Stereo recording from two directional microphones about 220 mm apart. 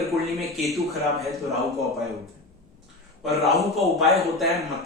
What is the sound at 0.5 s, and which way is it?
Speech, centre (ahead or behind).